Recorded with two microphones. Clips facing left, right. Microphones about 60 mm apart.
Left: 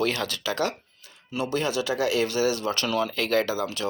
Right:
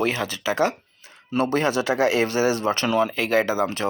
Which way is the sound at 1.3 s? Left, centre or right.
Right.